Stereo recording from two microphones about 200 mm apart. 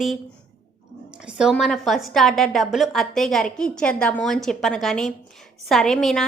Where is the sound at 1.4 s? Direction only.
Centre (ahead or behind).